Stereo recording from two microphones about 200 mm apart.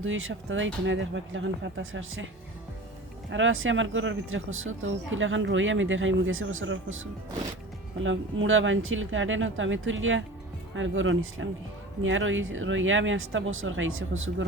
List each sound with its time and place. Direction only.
0.0 s speech: 80° right
3.3 s speech: 75° right (ahead or behind)
7.9 s speech: 70° right (ahead or behind)